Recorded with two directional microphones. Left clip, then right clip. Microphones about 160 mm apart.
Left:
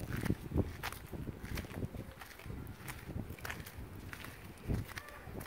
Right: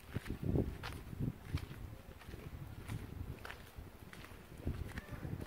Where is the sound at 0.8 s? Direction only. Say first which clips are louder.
Left 3 dB; 85° left.